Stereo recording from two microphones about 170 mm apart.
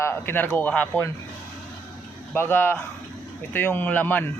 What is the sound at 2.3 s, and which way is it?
Speech, 10° left (ahead or behind).